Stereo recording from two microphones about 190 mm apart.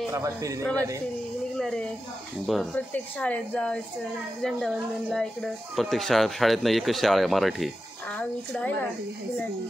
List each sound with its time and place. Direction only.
0.1 s a man's voice: 15° right (ahead or behind)
1.6 s a woman's voice: 5° left (ahead or behind)